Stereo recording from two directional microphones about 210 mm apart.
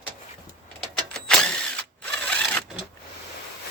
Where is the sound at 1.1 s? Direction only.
5° left (ahead or behind).